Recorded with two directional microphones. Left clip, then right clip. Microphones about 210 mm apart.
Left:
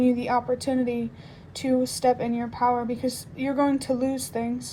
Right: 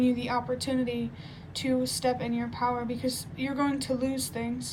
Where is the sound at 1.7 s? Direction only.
25° left (ahead or behind).